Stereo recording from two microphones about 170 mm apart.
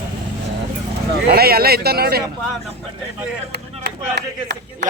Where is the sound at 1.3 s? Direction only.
65° right (ahead or behind).